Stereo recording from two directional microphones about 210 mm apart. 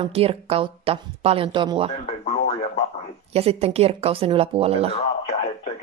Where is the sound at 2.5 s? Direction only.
30° left (ahead or behind).